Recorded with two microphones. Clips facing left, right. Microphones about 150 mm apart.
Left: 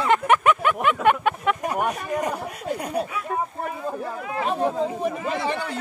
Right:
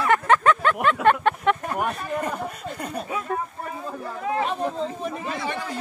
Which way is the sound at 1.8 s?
10° left (ahead or behind).